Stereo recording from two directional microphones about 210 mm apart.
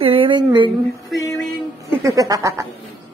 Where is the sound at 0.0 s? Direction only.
25° right (ahead or behind).